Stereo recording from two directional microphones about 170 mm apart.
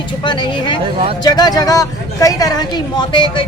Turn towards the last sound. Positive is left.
turn(degrees=25)  # may be behind; listen again after turning